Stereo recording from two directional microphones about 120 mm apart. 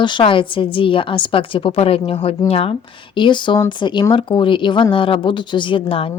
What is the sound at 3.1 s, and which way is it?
A woman's voice, 40° left (ahead or behind).